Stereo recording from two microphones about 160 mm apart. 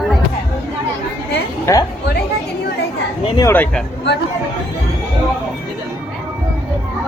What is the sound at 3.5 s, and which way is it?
Speech, 10° left (ahead or behind).